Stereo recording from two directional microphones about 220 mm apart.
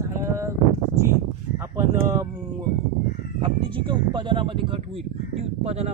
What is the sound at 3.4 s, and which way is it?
Speech, 20° right (ahead or behind).